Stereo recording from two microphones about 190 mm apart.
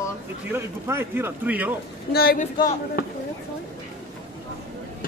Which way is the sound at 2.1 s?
55° left (ahead or behind).